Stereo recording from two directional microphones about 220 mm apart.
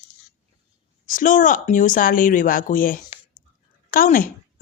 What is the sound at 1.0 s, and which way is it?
A woman's voice, 35° left (ahead or behind).